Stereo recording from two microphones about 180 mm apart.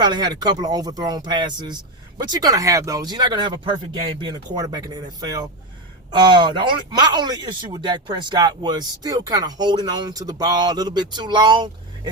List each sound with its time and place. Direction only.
0.0 s speech: 25° right (ahead or behind)